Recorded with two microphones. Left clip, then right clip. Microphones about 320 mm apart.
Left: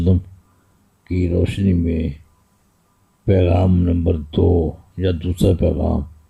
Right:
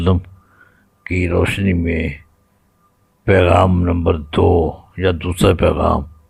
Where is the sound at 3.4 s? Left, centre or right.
Right.